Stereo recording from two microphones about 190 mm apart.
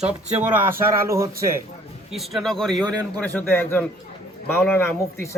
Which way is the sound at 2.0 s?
Centre (ahead or behind).